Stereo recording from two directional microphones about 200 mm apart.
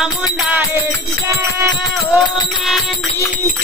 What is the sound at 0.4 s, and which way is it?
Music, 5° right (ahead or behind).